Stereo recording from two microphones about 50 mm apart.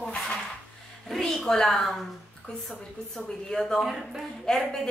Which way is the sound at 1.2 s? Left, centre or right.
Centre.